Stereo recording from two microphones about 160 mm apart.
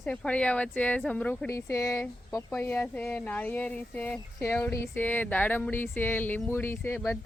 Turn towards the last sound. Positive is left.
turn(degrees=15)  # may be behind; listen again after turning